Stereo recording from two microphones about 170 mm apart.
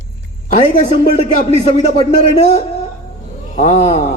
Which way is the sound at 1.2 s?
40° left (ahead or behind).